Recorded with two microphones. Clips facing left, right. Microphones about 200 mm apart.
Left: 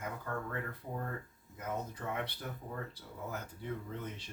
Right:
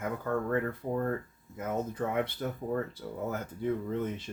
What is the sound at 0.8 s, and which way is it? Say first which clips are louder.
Speech: right 10 dB; 65° right (ahead or behind).